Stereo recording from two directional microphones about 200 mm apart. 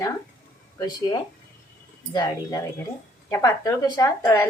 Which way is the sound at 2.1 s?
20° left (ahead or behind).